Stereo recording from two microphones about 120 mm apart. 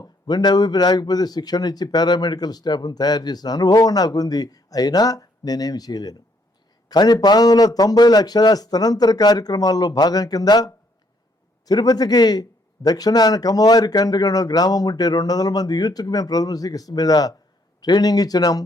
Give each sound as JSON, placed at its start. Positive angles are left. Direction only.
{"t": 0.3, "sound": "speech", "side_deg": 35}